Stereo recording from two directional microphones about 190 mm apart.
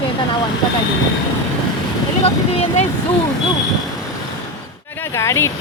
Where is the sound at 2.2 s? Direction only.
35° left (ahead or behind).